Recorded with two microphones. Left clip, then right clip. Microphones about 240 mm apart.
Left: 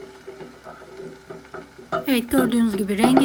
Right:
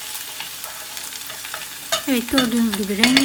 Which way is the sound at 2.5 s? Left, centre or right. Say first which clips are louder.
Even; centre.